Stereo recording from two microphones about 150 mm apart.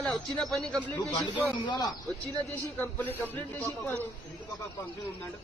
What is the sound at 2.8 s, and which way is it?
A man's voice, 10° left (ahead or behind).